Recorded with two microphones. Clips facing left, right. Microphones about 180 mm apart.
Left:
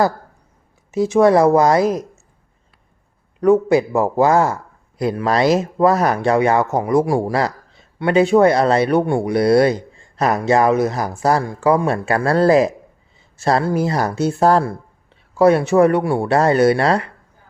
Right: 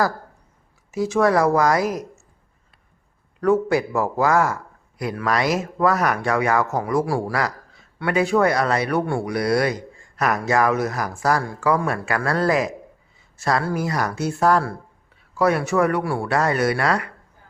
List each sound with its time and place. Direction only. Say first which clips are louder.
0.9 s speech: left 6 dB; 25° left (ahead or behind)
3.4 s speech: left 5 dB; 20° left (ahead or behind)